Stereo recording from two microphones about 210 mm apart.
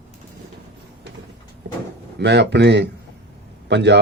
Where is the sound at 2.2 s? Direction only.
55° right (ahead or behind).